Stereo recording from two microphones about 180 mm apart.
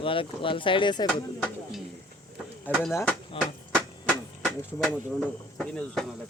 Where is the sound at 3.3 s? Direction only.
30° left (ahead or behind).